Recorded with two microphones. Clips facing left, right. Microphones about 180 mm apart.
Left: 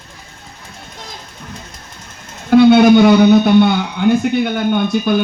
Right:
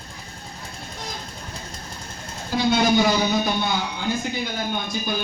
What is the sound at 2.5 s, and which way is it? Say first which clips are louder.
A man's voice: left 12 dB; 65° left (ahead or behind).